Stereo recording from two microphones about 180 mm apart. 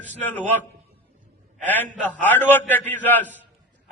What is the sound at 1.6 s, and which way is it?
A man's voice, 10° left (ahead or behind).